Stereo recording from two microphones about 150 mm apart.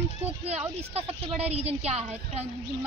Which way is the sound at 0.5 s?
45° right (ahead or behind).